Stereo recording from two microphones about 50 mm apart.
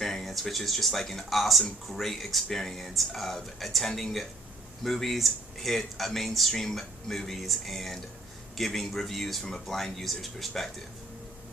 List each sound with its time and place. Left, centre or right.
0.0 s speech: centre